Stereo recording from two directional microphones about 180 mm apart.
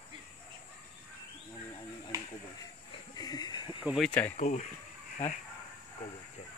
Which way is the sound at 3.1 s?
20° left (ahead or behind).